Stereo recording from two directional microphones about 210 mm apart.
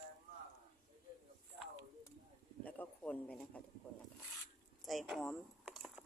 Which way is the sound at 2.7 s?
5° left (ahead or behind).